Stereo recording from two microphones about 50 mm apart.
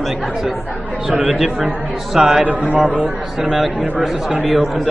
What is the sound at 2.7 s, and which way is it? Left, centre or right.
Speech, right.